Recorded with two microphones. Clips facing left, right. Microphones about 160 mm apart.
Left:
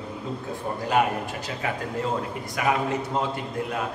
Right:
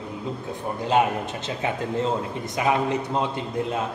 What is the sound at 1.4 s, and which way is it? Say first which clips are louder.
A man's voice: right 3 dB; 25° right (ahead or behind).